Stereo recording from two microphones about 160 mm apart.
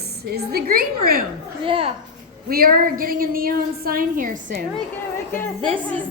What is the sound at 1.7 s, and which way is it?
Speech, 35° right (ahead or behind).